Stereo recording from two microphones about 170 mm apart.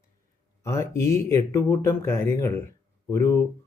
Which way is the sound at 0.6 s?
15° left (ahead or behind).